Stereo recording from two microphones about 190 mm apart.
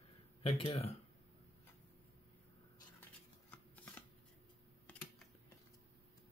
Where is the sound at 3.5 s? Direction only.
10° left (ahead or behind).